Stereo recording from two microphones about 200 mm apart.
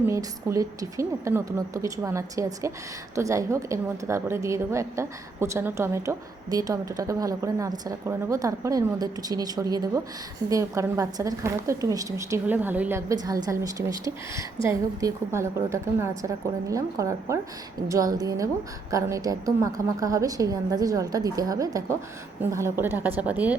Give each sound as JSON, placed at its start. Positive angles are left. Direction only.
{"t": 0.1, "sound": "a woman's voice", "side_deg": -15}